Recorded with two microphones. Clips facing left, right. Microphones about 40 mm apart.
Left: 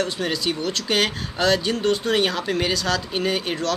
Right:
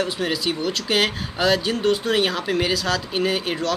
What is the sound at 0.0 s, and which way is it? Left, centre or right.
Speech, centre.